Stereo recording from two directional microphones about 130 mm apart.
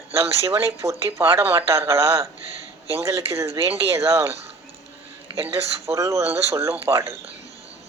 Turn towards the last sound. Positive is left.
turn(degrees=-20)  # may be behind; listen again after turning